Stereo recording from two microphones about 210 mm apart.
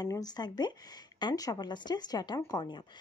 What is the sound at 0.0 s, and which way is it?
Speech, 20° left (ahead or behind).